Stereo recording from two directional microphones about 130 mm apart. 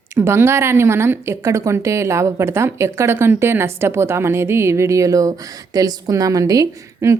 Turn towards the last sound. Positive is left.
turn(degrees=-25)  # may be behind; listen again after turning